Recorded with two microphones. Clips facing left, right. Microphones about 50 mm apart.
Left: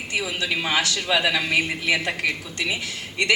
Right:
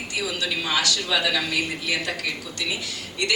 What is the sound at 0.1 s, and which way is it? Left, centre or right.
Speech, left.